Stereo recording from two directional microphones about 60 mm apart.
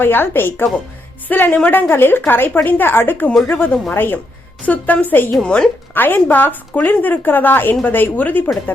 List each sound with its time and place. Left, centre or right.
0.0 s a woman's voice: left
5.4 s a woman's voice: centre
5.9 s speech: left